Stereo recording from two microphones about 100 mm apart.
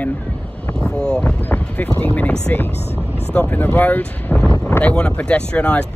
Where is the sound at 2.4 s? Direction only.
20° left (ahead or behind).